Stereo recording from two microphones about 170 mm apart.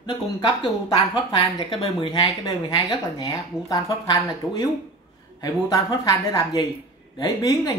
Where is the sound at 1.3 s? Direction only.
30° left (ahead or behind).